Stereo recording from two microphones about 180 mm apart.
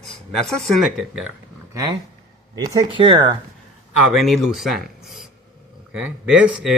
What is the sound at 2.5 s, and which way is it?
Speech, 20° right (ahead or behind).